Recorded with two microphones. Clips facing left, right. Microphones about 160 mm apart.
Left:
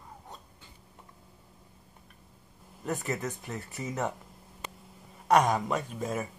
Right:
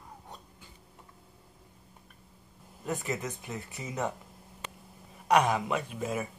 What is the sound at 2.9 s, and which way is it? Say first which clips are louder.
Speech: left 1 dB; 15° right (ahead or behind).